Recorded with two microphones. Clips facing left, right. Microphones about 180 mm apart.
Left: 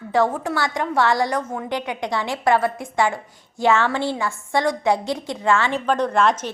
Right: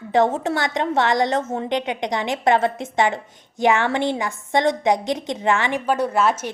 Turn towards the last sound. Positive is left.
turn(degrees=-5)  # may be behind; listen again after turning